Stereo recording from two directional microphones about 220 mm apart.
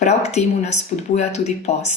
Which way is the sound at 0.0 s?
30° left (ahead or behind).